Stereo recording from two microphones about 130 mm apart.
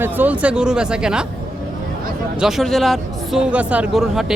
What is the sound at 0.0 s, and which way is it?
Speech, 15° right (ahead or behind).